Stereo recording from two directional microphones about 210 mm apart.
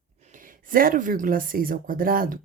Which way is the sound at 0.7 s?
40° right (ahead or behind).